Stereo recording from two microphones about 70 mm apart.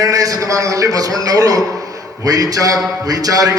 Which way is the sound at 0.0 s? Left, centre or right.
Right.